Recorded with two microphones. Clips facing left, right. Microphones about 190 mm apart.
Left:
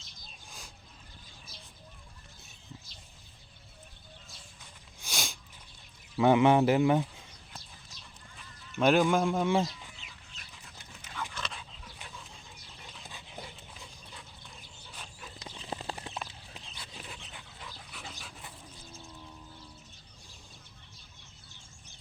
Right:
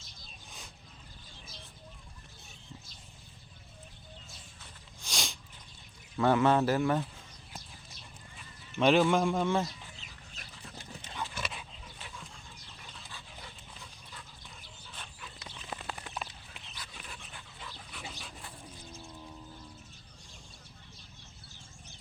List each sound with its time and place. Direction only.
4.9 s sniff: 5° left (ahead or behind)
6.1 s speech: 15° left (ahead or behind)
8.7 s speech: centre (ahead or behind)
10.0 s dog: 40° right (ahead or behind)
11.3 s dog: 5° right (ahead or behind)
13.1 s dog: 20° left (ahead or behind)
15.5 s a sound: 30° left (ahead or behind)
16.5 s dog: 30° left (ahead or behind)